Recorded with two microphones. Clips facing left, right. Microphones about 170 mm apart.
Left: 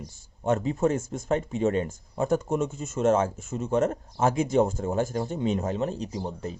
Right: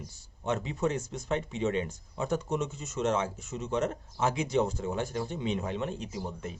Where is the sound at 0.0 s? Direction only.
45° left (ahead or behind).